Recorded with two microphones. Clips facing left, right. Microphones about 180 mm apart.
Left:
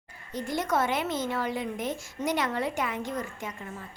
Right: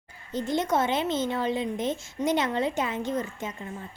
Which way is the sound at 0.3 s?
20° right (ahead or behind).